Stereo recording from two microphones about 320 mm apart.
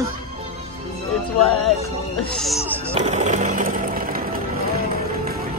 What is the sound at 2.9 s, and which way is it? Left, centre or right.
Speech, right.